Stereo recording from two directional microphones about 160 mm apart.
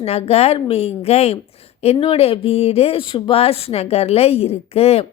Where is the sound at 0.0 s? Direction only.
40° left (ahead or behind).